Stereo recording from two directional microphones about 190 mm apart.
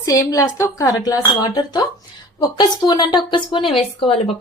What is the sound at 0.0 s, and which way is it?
A woman's voice, 15° left (ahead or behind).